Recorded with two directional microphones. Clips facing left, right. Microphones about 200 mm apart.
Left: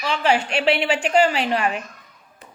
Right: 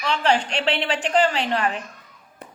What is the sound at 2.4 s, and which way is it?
Tap, 60° right (ahead or behind).